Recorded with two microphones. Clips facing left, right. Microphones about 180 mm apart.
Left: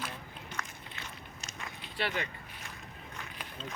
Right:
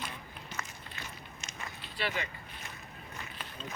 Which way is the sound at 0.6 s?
5° right (ahead or behind).